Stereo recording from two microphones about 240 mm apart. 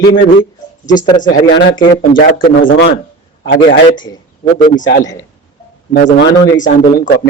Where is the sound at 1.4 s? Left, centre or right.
Left.